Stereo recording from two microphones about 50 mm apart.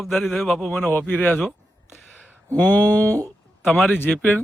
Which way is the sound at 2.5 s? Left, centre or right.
Left.